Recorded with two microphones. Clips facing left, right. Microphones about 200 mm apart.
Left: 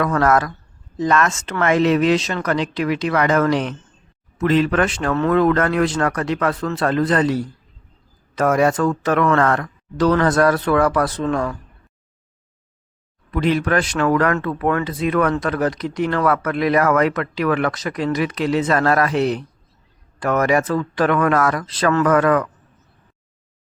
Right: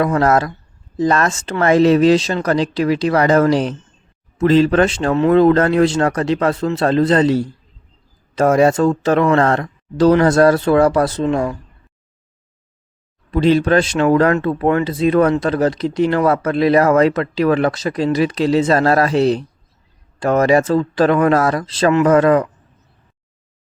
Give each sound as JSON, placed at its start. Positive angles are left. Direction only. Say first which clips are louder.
{"t": 0.0, "sound": "speech", "louder": "right 2 dB", "side_deg": -25}
{"t": 13.3, "sound": "speech", "louder": "right 5 dB", "side_deg": -30}